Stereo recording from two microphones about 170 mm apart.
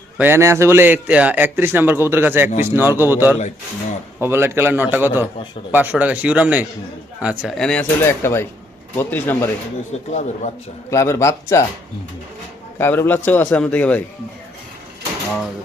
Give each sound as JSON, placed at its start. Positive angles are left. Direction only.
{"t": 0.2, "sound": "a man's voice", "side_deg": -15}
{"t": 8.0, "sound": "a man's voice", "side_deg": 15}
{"t": 10.1, "sound": "speech", "side_deg": 45}
{"t": 10.9, "sound": "a man's voice", "side_deg": 15}
{"t": 12.8, "sound": "a man's voice", "side_deg": 10}